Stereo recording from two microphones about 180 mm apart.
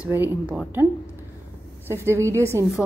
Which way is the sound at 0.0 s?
10° right (ahead or behind).